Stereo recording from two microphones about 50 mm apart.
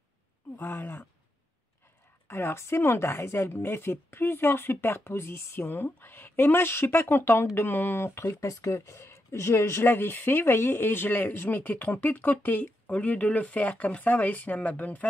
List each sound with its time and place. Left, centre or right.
0.6 s speech: left
2.2 s speech: left
8.3 s speech: left
9.8 s speech: left